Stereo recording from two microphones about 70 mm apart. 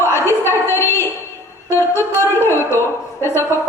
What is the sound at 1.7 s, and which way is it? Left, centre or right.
A woman's voice, left.